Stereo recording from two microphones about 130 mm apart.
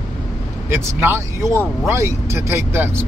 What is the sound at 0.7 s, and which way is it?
Speech, 20° right (ahead or behind).